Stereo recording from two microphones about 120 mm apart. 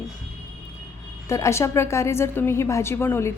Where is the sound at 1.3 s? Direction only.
25° left (ahead or behind).